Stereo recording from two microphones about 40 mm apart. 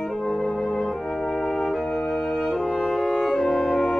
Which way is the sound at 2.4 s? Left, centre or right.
Centre.